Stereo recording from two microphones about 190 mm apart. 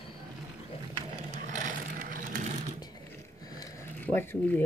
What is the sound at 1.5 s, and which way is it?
Vehicle, 45° right (ahead or behind).